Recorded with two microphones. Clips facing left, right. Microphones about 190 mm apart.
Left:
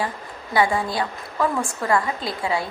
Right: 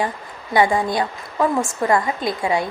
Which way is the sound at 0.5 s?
20° right (ahead or behind).